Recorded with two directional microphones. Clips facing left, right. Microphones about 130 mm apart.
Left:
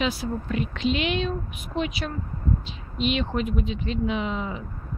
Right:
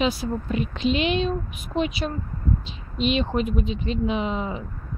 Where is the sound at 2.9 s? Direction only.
30° right (ahead or behind).